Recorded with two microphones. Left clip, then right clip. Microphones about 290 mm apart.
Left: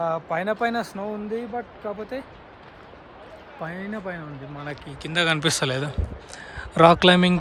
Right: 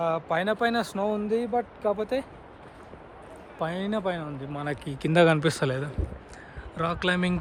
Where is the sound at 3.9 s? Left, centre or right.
Centre.